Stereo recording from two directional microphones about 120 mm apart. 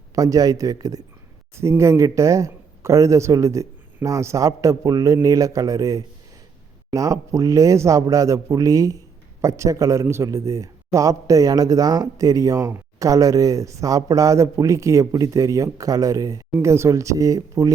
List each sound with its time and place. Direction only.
0.2 s a man's voice: 30° right (ahead or behind)